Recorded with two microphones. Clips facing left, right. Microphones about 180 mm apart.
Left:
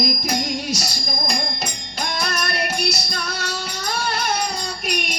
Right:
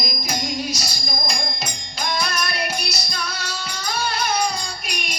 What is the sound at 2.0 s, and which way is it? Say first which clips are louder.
Music: right 1 dB; 55° left (ahead or behind).